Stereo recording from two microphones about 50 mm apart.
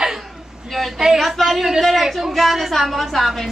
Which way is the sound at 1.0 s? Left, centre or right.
Centre.